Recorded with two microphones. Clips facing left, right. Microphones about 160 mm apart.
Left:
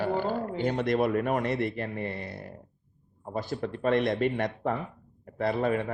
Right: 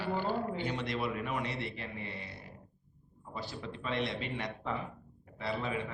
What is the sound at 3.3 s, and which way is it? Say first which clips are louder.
A man's voice: left 9 dB; 50° left (ahead or behind).